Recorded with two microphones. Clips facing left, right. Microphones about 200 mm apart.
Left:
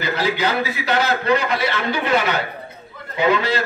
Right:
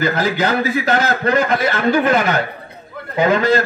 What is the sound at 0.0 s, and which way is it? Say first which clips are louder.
A man's voice: right 3 dB; 45° right (ahead or behind).